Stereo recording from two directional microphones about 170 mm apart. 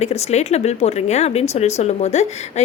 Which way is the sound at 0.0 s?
40° left (ahead or behind).